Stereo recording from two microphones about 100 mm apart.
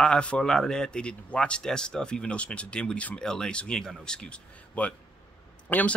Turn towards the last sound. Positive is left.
turn(degrees=15)  # may be behind; listen again after turning